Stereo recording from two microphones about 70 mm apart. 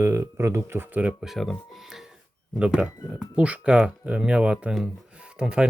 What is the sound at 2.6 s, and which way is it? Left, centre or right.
Speech, centre.